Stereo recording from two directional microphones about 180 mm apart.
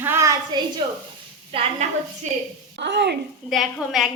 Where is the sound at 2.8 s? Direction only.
70° right (ahead or behind).